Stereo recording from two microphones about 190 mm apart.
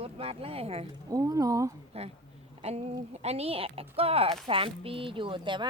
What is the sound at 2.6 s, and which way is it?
A woman's voice, 35° right (ahead or behind).